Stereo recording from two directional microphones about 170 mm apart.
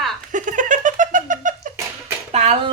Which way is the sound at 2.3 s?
40° right (ahead or behind).